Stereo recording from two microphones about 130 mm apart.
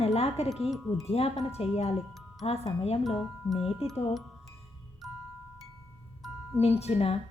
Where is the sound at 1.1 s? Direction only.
50° left (ahead or behind).